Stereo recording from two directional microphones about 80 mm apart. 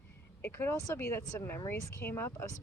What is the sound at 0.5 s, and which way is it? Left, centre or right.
Speech, left.